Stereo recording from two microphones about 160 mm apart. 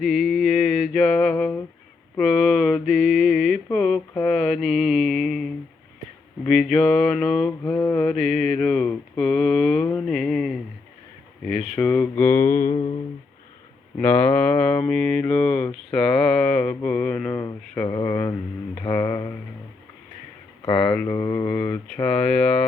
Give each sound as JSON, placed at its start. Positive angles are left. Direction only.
{"t": 0.0, "sound": "a sound", "side_deg": 0}
{"t": 2.1, "sound": "mantra", "side_deg": 5}
{"t": 11.8, "sound": "mantra", "side_deg": 10}
{"t": 14.0, "sound": "mantra", "side_deg": 10}
{"t": 17.8, "sound": "mantra", "side_deg": 20}
{"t": 20.7, "sound": "mantra", "side_deg": 5}